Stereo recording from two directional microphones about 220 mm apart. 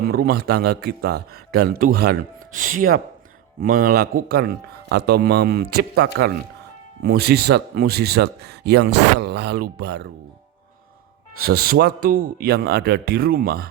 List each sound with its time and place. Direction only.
0.0 s speech: 45° right (ahead or behind)
11.3 s speech: 45° right (ahead or behind)